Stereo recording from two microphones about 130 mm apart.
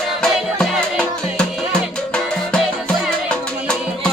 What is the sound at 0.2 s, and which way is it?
Music, 5° left (ahead or behind).